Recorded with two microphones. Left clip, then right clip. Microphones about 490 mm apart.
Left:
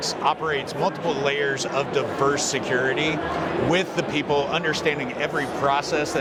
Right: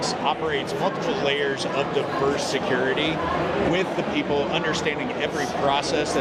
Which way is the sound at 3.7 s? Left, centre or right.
Left.